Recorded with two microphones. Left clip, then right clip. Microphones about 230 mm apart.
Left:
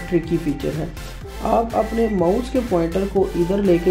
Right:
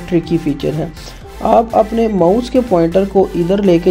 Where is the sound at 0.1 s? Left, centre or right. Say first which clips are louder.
Right 6 dB; right.